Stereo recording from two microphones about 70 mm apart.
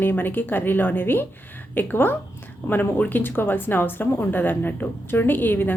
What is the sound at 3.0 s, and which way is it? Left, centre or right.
A woman's voice, left.